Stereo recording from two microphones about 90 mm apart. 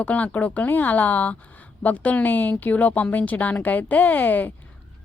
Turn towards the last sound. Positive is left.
turn(degrees=20)  # may be behind; listen again after turning